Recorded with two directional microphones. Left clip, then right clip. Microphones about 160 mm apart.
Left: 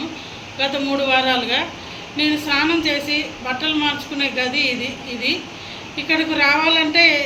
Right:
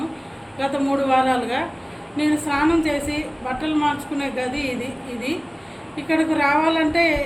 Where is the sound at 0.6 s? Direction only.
15° right (ahead or behind).